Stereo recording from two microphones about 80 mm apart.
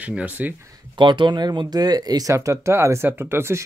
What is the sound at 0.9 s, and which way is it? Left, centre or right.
Speech, right.